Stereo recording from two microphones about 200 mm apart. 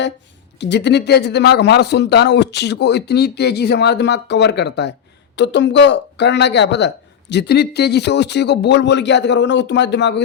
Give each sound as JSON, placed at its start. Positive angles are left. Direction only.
{"t": 0.6, "sound": "speech", "side_deg": 60}